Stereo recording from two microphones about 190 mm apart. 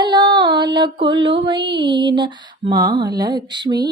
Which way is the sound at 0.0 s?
20° right (ahead or behind).